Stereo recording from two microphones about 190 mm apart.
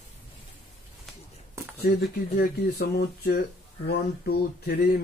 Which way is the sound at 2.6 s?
60° left (ahead or behind).